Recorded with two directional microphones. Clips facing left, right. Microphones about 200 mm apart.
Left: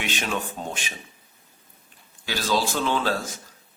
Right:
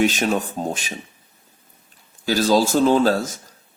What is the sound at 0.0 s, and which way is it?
Speech, 40° right (ahead or behind).